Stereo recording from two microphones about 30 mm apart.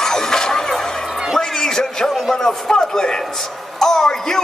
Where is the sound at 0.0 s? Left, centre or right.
Centre.